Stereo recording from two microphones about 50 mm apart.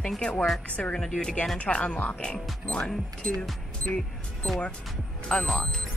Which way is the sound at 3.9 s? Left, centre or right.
Centre.